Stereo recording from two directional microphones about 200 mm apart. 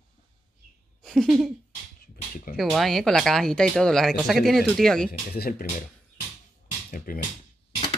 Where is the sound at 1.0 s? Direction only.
Centre (ahead or behind).